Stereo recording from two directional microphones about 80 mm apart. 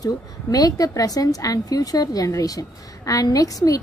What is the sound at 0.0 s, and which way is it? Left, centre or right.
A woman's voice, left.